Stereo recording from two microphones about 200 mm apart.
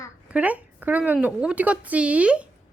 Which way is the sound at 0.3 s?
5° right (ahead or behind).